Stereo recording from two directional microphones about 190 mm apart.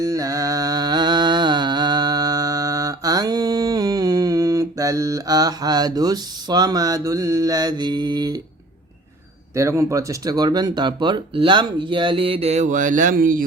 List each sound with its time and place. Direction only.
0.0 s music: 20° right (ahead or behind)
9.6 s speech: 15° right (ahead or behind); by 13.4 s 45° right (ahead or behind)